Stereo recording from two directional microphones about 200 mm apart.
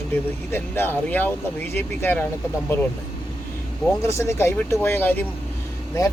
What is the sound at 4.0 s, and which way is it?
Speech, 15° left (ahead or behind).